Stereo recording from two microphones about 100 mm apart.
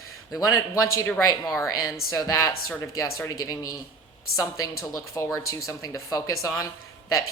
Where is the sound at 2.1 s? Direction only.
30° left (ahead or behind).